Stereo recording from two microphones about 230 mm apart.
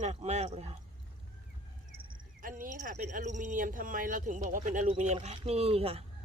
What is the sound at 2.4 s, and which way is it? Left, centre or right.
Speech, right.